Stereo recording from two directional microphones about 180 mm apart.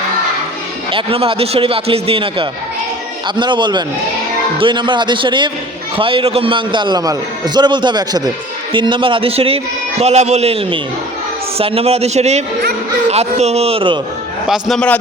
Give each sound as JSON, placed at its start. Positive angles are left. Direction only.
{"t": 0.9, "sound": "a man's voice", "side_deg": -30}
{"t": 14.4, "sound": "a man's voice", "side_deg": 0}